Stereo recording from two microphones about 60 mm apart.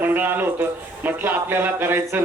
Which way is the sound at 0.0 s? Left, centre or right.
Right.